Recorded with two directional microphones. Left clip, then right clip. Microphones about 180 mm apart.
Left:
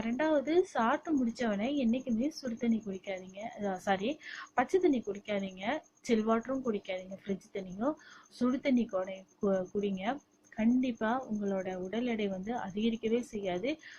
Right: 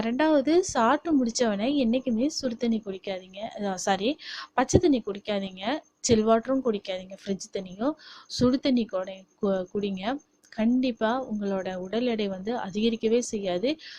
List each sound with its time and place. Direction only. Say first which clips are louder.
0.0 s a woman's voice: right 7 dB; 50° right (ahead or behind)